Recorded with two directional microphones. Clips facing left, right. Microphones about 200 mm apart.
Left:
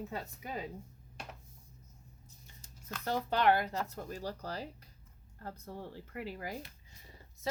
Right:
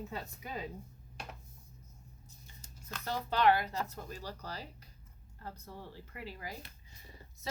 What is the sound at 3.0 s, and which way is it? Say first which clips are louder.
Speech: even; 50° left (ahead or behind).